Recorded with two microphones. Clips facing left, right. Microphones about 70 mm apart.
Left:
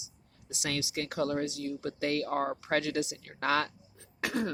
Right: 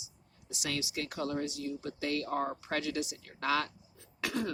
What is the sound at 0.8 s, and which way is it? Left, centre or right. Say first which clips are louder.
Speech: left 4 dB; left.